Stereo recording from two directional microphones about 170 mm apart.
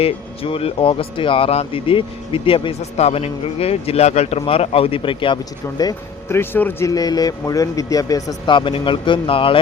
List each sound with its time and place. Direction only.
0.0 s speech: 35° left (ahead or behind)